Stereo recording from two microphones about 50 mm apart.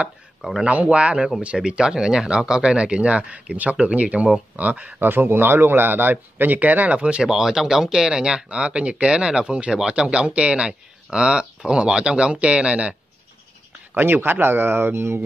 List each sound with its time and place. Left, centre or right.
0.7 s speech: right
5.0 s a man's voice: right
7.2 s speech: centre; by 12.9 s right
13.9 s a man's voice: right